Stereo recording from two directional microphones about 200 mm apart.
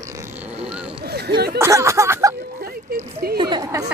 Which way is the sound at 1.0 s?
55° right (ahead or behind).